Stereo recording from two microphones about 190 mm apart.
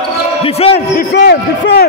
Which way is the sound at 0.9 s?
60° left (ahead or behind).